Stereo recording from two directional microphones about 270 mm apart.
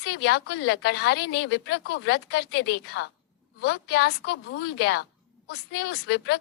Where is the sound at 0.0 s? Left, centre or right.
Left.